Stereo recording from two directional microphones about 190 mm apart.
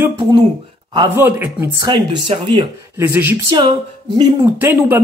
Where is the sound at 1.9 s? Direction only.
25° right (ahead or behind).